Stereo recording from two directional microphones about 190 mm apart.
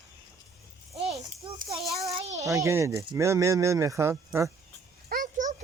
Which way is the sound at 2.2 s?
35° right (ahead or behind).